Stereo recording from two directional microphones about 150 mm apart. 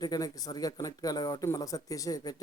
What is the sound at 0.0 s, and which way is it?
Speech, 25° left (ahead or behind).